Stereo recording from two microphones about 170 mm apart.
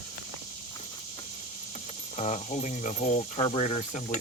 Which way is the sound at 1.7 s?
45° left (ahead or behind).